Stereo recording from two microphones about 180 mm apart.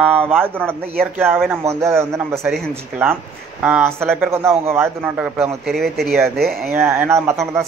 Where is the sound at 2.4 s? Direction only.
Centre (ahead or behind).